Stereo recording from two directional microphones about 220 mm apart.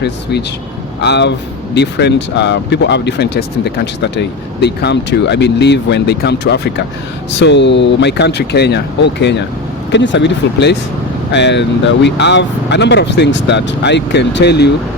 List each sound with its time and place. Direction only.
0.0 s speech: 50° left (ahead or behind)